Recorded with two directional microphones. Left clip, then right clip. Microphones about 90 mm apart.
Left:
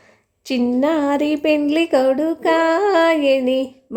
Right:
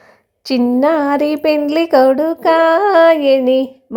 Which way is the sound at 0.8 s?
40° right (ahead or behind).